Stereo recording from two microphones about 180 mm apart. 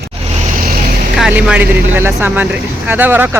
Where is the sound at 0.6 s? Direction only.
50° right (ahead or behind).